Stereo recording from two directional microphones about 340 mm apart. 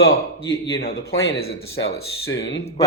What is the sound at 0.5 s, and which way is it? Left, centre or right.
A man's voice, left.